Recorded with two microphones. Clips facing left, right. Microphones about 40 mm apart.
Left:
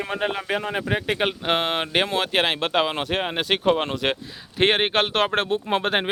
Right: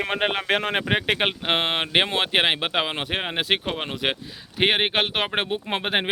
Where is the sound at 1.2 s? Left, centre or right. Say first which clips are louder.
Even; right.